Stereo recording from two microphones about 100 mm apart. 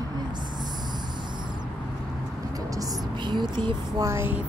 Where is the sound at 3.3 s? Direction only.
50° right (ahead or behind).